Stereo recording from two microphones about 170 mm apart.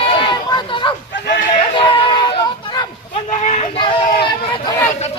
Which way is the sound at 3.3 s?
45° left (ahead or behind).